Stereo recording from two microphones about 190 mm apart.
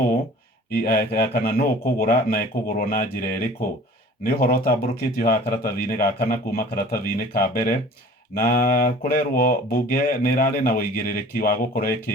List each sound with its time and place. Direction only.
0.7 s speech: 50° left (ahead or behind)